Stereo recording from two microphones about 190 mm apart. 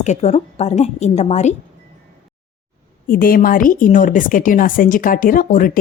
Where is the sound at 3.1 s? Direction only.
50° left (ahead or behind).